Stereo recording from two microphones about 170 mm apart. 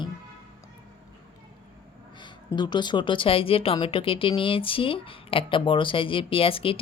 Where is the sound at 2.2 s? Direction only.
25° left (ahead or behind).